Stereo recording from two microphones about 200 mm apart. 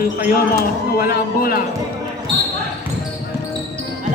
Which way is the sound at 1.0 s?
50° left (ahead or behind).